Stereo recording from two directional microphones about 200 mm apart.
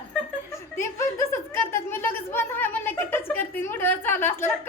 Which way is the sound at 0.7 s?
15° left (ahead or behind).